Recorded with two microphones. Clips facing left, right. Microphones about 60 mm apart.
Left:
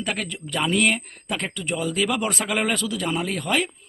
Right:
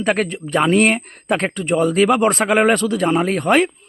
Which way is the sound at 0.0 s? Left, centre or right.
Right.